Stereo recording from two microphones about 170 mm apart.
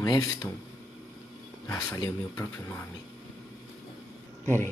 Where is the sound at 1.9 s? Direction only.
15° left (ahead or behind).